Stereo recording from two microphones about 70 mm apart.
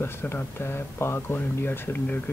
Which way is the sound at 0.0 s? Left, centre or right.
Left.